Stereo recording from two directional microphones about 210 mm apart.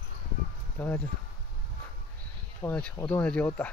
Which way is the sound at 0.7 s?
10° left (ahead or behind).